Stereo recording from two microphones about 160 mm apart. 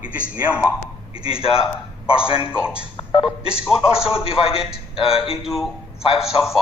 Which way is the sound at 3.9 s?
35° left (ahead or behind).